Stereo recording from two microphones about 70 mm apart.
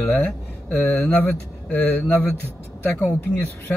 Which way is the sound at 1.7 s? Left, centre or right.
Left.